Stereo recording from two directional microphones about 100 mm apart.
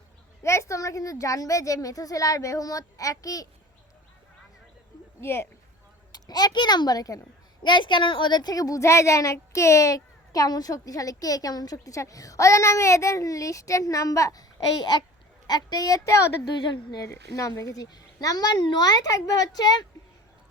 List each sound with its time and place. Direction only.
0.4 s a woman's voice: 30° left (ahead or behind)
5.2 s speech: 25° left (ahead or behind)
6.1 s a child's voice: 40° left (ahead or behind)
7.6 s a woman's voice: 50° left (ahead or behind); by 16.3 s 30° left (ahead or behind)
16.7 s speech: 45° left (ahead or behind)
17.1 s a woman's voice: 30° left (ahead or behind)